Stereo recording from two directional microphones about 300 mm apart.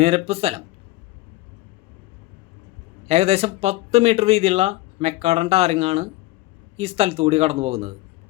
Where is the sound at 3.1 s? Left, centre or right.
Right.